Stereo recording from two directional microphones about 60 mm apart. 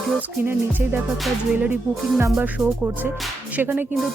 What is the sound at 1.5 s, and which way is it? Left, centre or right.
Speech, right.